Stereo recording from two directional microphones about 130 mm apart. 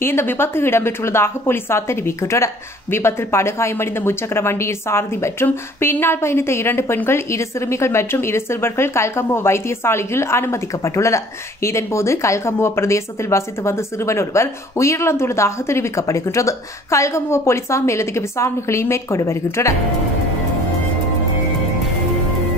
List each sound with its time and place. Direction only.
0.0 s a woman's voice: 20° left (ahead or behind)